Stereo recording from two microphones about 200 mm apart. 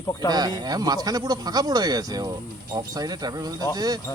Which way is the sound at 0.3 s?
20° right (ahead or behind).